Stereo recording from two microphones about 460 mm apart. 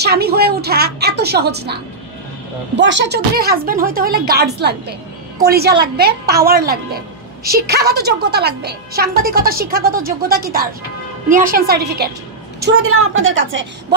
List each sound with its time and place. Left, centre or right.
0.0 s a woman's voice: right